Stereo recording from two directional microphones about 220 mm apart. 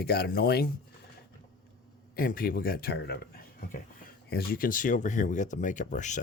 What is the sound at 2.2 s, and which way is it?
Speech, 40° left (ahead or behind).